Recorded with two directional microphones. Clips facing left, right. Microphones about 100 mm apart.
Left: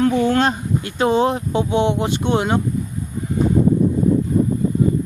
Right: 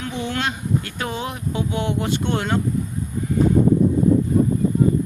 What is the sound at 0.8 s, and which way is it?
Speech, 25° left (ahead or behind).